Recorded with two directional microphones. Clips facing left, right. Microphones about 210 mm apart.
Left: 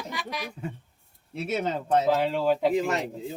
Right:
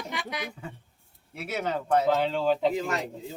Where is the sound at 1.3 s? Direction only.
25° left (ahead or behind).